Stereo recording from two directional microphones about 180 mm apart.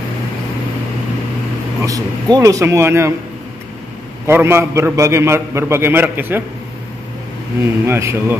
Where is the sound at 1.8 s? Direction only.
20° right (ahead or behind).